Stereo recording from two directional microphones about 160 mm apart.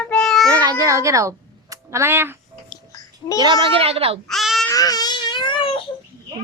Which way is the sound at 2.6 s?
25° left (ahead or behind).